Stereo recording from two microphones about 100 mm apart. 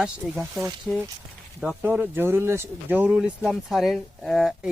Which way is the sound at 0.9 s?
5° left (ahead or behind).